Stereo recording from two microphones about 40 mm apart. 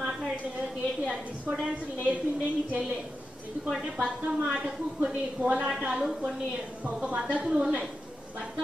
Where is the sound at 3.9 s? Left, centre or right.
Right.